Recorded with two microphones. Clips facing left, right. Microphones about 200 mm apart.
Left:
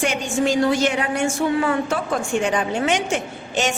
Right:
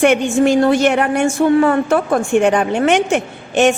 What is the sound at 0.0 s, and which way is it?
A woman's voice, 60° right (ahead or behind).